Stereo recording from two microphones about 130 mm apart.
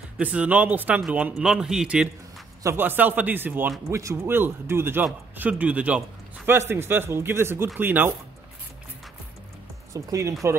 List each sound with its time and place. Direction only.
0.2 s speech: 10° right (ahead or behind)
2.6 s speech: 15° right (ahead or behind)
9.9 s speech: 25° right (ahead or behind)